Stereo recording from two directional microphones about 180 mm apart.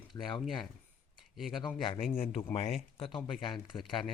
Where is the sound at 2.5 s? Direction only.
35° left (ahead or behind).